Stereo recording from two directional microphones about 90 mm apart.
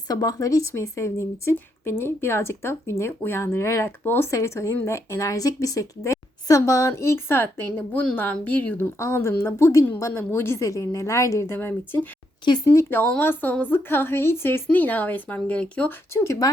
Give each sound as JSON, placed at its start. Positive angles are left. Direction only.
{"t": 0.1, "sound": "speech", "side_deg": 45}
{"t": 4.3, "sound": "speech", "side_deg": 35}
{"t": 9.0, "sound": "speech", "side_deg": 30}
{"t": 16.1, "sound": "speech", "side_deg": 35}